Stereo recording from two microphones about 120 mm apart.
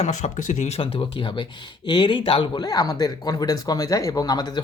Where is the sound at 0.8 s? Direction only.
50° left (ahead or behind).